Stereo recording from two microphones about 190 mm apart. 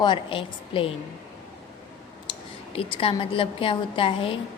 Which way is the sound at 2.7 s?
30° left (ahead or behind).